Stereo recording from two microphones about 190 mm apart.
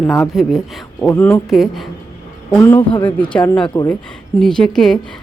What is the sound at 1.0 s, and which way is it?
Speech, 10° left (ahead or behind).